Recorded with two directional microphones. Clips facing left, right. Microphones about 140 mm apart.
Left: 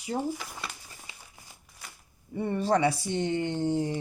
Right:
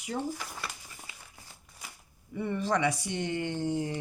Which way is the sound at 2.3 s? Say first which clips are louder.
Left 4 dB; 35° left (ahead or behind).